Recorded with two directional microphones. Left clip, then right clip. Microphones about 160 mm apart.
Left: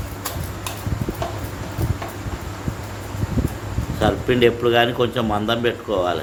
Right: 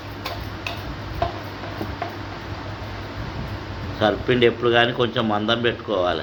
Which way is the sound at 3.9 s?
10° left (ahead or behind).